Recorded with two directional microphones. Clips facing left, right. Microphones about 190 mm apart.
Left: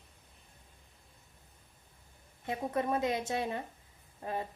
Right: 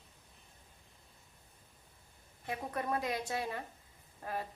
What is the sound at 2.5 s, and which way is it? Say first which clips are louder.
A woman's voice: left 4 dB; 25° left (ahead or behind).